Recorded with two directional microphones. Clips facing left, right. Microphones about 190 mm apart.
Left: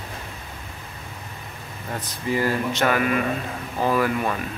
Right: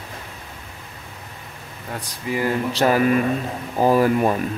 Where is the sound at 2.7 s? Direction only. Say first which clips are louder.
Right 4 dB; 35° right (ahead or behind).